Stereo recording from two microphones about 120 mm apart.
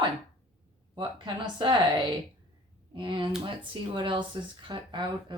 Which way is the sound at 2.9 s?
45° right (ahead or behind).